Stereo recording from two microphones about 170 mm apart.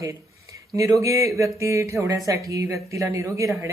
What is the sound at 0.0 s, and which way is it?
Speech, 20° right (ahead or behind).